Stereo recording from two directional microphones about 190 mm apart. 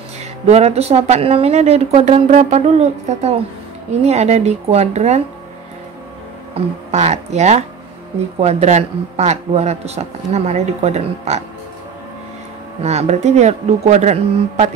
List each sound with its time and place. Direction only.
0.5 s a man's voice: 35° right (ahead or behind)
6.5 s a man's voice: 35° right (ahead or behind)
12.8 s a man's voice: 35° right (ahead or behind)